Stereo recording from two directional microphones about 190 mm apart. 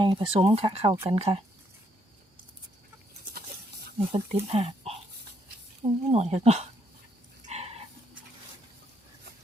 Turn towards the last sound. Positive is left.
turn(degrees=-35)  # may be behind; listen again after turning